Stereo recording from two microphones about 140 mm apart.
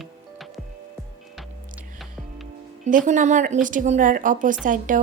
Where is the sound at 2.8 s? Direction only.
65° right (ahead or behind).